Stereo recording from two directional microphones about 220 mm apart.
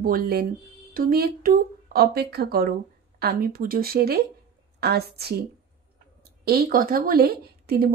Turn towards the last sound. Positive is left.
turn(degrees=-45)  # may be behind; listen again after turning